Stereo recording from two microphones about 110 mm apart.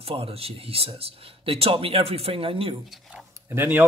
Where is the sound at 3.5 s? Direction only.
15° right (ahead or behind).